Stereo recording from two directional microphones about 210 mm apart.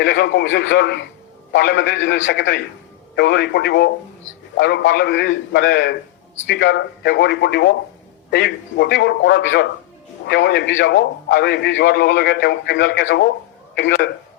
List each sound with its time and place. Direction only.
0.0 s a man's voice: 55° left (ahead or behind)